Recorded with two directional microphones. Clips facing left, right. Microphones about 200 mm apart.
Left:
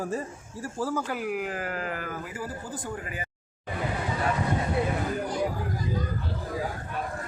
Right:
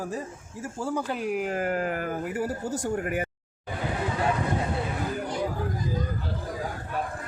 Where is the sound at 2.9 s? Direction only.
60° right (ahead or behind).